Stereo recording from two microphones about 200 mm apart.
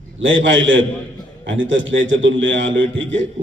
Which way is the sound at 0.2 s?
70° right (ahead or behind).